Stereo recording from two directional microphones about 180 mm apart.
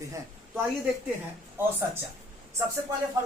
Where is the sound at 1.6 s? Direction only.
10° right (ahead or behind).